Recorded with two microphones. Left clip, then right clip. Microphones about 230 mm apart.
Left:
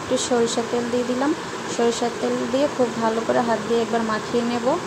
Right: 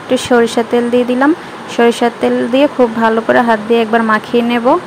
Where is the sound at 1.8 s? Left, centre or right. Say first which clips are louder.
Right 11 dB; right.